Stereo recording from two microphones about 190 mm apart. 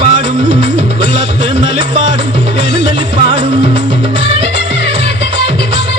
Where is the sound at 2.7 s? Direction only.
25° right (ahead or behind).